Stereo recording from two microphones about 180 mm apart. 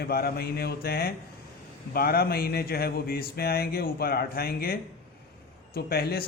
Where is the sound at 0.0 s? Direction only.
60° left (ahead or behind).